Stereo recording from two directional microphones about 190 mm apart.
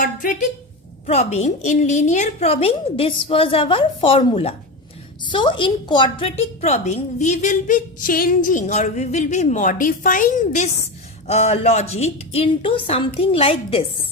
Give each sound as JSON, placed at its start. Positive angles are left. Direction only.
{"t": 0.0, "sound": "a woman's voice", "side_deg": 45}